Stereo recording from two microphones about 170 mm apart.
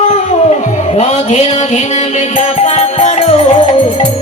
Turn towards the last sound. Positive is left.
turn(degrees=35)  # may be behind; listen again after turning